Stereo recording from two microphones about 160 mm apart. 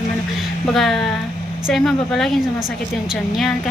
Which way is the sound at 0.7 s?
Centre (ahead or behind).